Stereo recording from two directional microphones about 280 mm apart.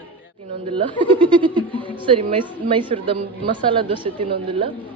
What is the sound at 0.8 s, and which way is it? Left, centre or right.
Speech, centre.